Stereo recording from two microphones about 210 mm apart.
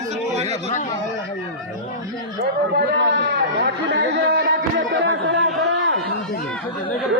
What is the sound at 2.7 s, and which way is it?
A man's voice, 60° right (ahead or behind).